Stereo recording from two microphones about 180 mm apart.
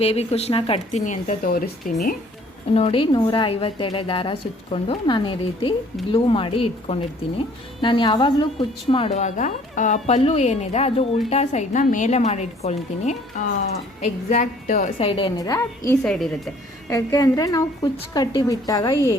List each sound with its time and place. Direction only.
0.0 s a woman's voice: 35° left (ahead or behind); by 1.7 s 55° left (ahead or behind)
2.7 s a woman's voice: 30° left (ahead or behind)
14.9 s a woman's voice: 30° left (ahead or behind)